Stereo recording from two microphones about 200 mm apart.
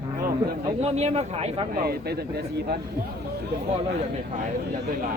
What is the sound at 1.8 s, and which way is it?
Speech, 50° right (ahead or behind).